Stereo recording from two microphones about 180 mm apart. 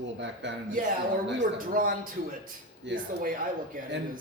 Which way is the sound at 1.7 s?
50° right (ahead or behind).